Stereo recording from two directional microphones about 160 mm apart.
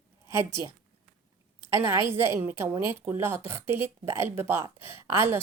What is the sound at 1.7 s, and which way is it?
A woman's voice, 15° right (ahead or behind).